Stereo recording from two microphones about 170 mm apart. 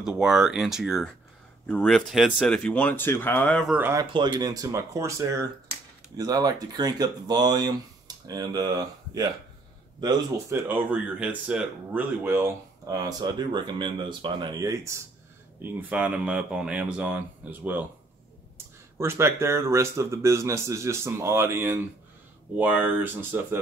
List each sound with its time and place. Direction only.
0.0 s speech: 5° right (ahead or behind)
3.6 s speech: 10° right (ahead or behind)
4.0 s speech: 25° right (ahead or behind); by 17.8 s 10° right (ahead or behind)
18.9 s speech: 15° right (ahead or behind)